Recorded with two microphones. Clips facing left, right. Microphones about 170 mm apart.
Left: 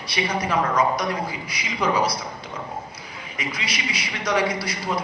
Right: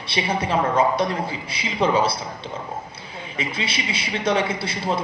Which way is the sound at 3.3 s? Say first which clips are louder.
Right 3 dB; 25° right (ahead or behind).